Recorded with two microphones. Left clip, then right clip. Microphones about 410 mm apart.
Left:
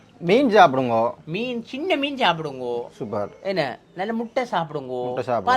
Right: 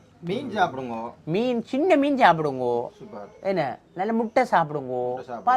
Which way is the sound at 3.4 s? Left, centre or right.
Right.